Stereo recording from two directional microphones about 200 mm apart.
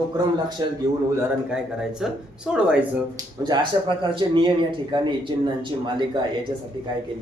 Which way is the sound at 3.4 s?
20° right (ahead or behind).